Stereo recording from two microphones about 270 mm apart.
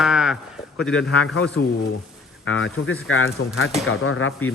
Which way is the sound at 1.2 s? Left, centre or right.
Left.